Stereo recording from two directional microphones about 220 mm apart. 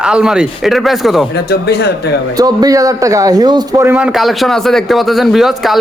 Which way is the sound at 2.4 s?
15° right (ahead or behind).